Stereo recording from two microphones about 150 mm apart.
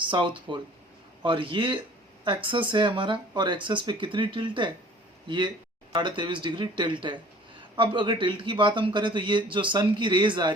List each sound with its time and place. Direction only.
0.0 s a man's voice: 35° right (ahead or behind)
5.9 s a man's voice: 30° right (ahead or behind)